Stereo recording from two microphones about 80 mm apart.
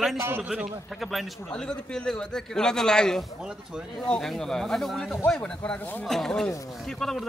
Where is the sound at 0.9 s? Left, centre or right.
Centre.